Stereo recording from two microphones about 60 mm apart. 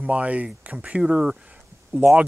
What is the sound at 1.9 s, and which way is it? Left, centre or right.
Speech, right.